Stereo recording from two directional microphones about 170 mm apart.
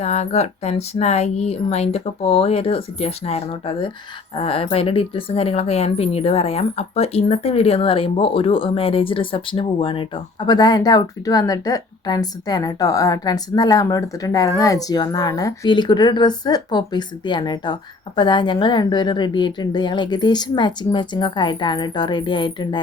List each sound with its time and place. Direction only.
0.0 s speech: 40° left (ahead or behind)